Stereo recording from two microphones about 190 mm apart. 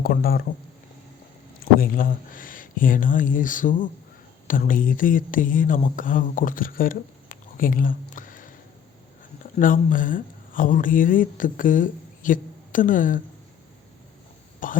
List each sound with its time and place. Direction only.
0.0 s speech: 50° left (ahead or behind)
1.8 s speech: 45° left (ahead or behind)
9.6 s speech: 45° left (ahead or behind)
14.6 s speech: 45° left (ahead or behind)